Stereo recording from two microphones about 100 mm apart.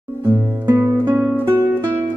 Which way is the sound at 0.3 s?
20° right (ahead or behind).